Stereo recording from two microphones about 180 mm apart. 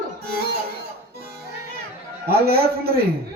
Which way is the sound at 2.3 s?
60° right (ahead or behind).